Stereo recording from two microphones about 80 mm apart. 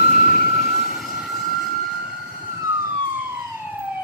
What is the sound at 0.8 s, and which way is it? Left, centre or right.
Vehicle, centre.